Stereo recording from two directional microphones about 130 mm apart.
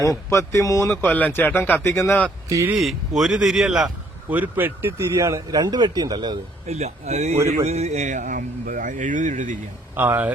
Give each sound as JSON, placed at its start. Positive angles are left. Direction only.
{"t": 0.0, "sound": "speech", "side_deg": 20}
{"t": 0.9, "sound": "speech", "side_deg": 15}
{"t": 2.7, "sound": "a man's voice", "side_deg": 0}
{"t": 4.3, "sound": "speech", "side_deg": -15}
{"t": 6.7, "sound": "a man's voice", "side_deg": -55}
{"t": 9.9, "sound": "speech", "side_deg": -15}